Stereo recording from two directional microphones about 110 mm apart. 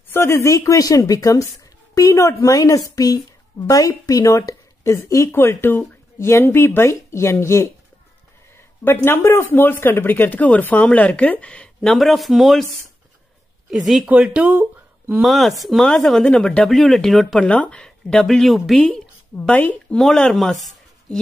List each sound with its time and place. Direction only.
0.1 s speech: 25° left (ahead or behind); by 12.6 s centre (ahead or behind)
13.7 s speech: centre (ahead or behind)
15.2 s speech: centre (ahead or behind)